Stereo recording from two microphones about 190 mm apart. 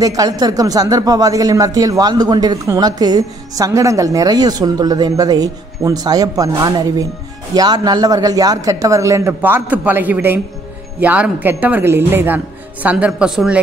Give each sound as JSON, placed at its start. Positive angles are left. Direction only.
{"t": 0.0, "sound": "a man's voice", "side_deg": -20}